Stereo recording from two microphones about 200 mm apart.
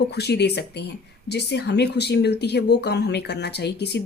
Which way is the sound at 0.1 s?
55° left (ahead or behind).